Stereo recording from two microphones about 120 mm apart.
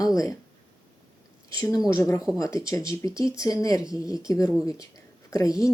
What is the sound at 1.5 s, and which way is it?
A woman's voice, 30° left (ahead or behind).